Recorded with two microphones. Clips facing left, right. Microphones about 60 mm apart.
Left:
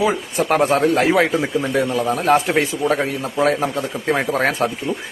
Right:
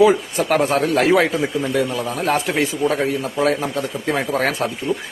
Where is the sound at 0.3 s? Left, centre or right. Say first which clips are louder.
Left 1 dB; left.